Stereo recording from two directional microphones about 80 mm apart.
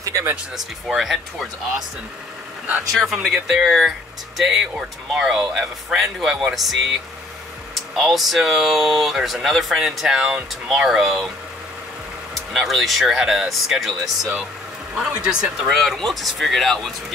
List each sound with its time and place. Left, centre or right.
0.0 s speech: right
0.8 s speech: centre
2.9 s speech: centre
7.9 s speech: centre
12.5 s speech: centre
15.0 s speech: centre
15.7 s speech: centre